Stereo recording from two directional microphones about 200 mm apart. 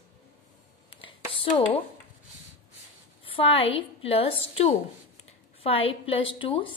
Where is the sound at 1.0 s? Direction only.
25° left (ahead or behind).